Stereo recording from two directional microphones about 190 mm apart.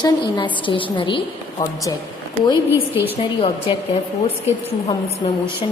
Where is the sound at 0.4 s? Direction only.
25° left (ahead or behind).